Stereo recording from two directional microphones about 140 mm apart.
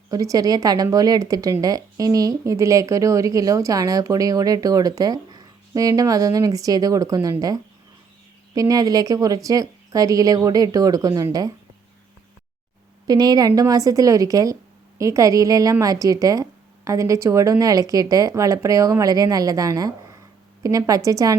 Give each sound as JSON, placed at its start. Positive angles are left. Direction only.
{"t": 0.1, "sound": "a woman's voice", "side_deg": -25}
{"t": 13.1, "sound": "a woman's voice", "side_deg": -30}